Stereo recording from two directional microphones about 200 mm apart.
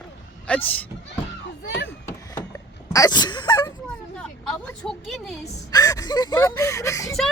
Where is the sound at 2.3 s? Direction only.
15° left (ahead or behind).